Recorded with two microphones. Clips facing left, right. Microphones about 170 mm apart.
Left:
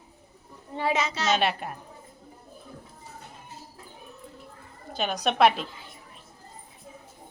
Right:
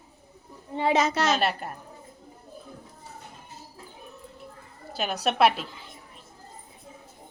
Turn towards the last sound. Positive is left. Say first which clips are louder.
# left 1 dB
turn(degrees=0)  # may be behind; listen again after turning